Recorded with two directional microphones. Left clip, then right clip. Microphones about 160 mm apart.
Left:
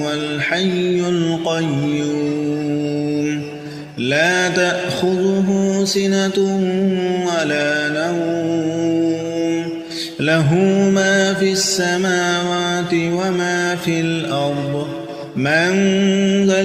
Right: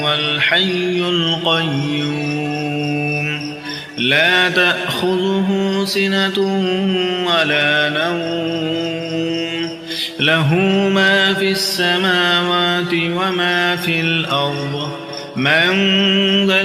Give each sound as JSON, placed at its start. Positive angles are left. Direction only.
{"t": 0.1, "sound": "mantra", "side_deg": 50}
{"t": 4.0, "sound": "mantra", "side_deg": 50}
{"t": 10.5, "sound": "mantra", "side_deg": 35}